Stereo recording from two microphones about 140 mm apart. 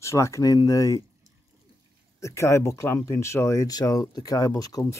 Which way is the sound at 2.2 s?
20° left (ahead or behind).